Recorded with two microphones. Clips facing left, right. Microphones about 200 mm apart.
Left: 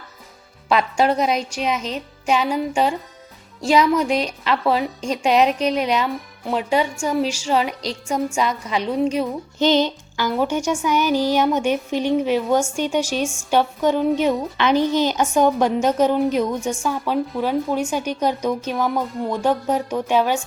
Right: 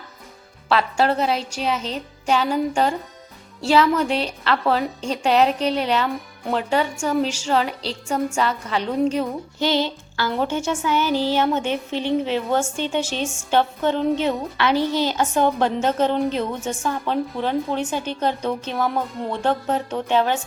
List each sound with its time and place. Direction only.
0.7 s a woman's voice: 15° left (ahead or behind)
1.7 s a woman's voice: 30° right (ahead or behind)
2.2 s a woman's voice: 10° left (ahead or behind)
7.7 s a woman's voice: 35° right (ahead or behind)
8.0 s a woman's voice: 10° left (ahead or behind)
9.6 s music: 20° left (ahead or behind)
10.3 s a woman's voice: 10° left (ahead or behind)